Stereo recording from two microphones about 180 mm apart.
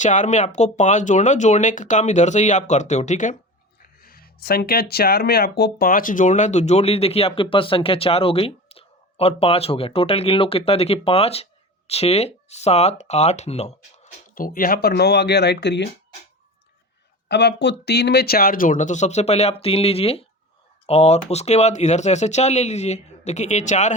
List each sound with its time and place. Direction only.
0.0 s speech: 45° left (ahead or behind)
3.8 s speech: 55° left (ahead or behind); by 15.9 s 70° left (ahead or behind)
17.2 s speech: 70° left (ahead or behind); by 23.9 s 40° left (ahead or behind)